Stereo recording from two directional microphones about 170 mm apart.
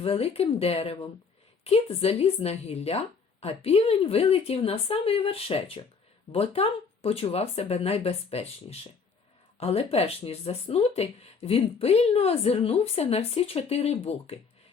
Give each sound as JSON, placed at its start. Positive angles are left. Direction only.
{"t": 0.0, "sound": "speech", "side_deg": 35}